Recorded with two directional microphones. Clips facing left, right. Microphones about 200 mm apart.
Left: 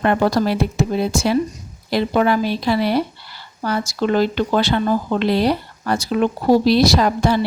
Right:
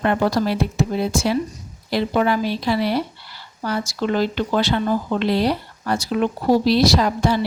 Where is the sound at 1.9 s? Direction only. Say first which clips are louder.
Left 2 dB; 60° left (ahead or behind).